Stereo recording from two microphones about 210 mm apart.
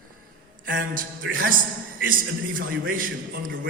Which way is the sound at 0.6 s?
40° right (ahead or behind).